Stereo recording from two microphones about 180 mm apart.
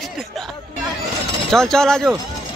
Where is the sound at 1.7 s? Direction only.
5° left (ahead or behind).